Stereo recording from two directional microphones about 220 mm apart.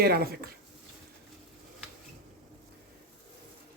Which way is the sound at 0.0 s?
45° right (ahead or behind).